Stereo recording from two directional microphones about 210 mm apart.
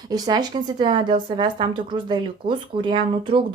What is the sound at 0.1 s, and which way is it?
Speech, 20° right (ahead or behind).